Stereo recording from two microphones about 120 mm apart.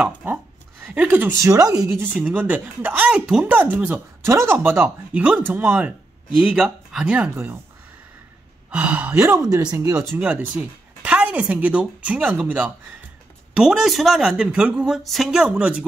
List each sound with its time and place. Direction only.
0.0 s speech: 15° right (ahead or behind)
1.4 s speech: 30° right (ahead or behind)
2.3 s speech: 15° right (ahead or behind)
8.6 s speech: 10° right (ahead or behind)
9.2 s speech: 25° right (ahead or behind)
10.1 s speech: 15° right (ahead or behind)